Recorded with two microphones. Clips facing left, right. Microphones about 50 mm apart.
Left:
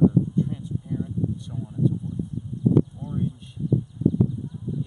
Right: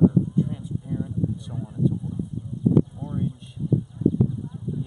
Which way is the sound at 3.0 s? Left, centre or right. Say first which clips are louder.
Right 1 dB; centre.